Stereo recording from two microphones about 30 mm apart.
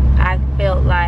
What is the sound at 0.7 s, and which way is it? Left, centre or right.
Speech, centre.